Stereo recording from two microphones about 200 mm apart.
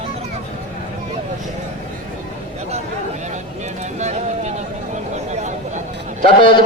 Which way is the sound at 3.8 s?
35° right (ahead or behind).